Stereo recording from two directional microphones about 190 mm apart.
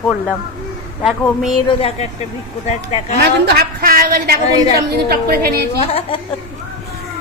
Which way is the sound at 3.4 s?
55° right (ahead or behind).